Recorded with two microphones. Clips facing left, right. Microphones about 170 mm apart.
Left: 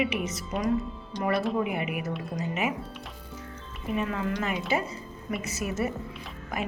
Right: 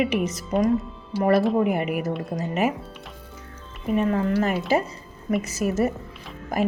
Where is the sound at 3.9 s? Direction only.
40° right (ahead or behind).